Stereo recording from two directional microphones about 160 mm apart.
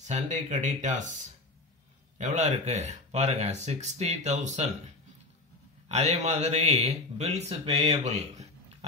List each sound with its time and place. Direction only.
0.0 s a man's voice: 45° right (ahead or behind)
2.1 s a man's voice: 45° right (ahead or behind)
5.9 s a man's voice: 45° right (ahead or behind)